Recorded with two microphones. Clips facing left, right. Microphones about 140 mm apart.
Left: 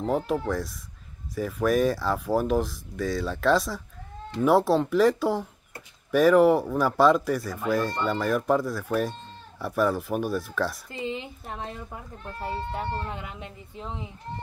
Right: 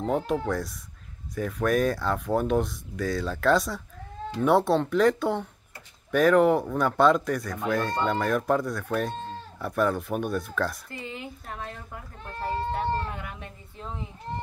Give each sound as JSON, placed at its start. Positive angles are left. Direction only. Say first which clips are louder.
{"t": 0.0, "sound": "speech", "louder": "even", "side_deg": 0}
{"t": 10.9, "sound": "speech", "louder": "left 5 dB", "side_deg": 20}